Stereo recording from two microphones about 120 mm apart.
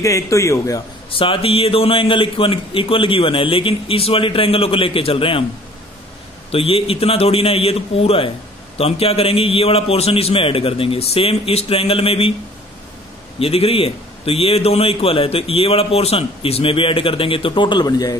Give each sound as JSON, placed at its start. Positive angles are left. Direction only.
{"t": 0.0, "sound": "a man's voice", "side_deg": 25}
{"t": 1.1, "sound": "a man's voice", "side_deg": 50}
{"t": 6.5, "sound": "a man's voice", "side_deg": 55}
{"t": 13.4, "sound": "a man's voice", "side_deg": 55}